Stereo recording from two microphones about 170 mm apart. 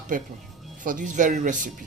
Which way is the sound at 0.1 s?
50° right (ahead or behind).